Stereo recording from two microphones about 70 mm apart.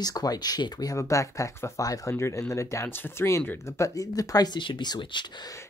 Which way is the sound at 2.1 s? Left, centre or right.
Left.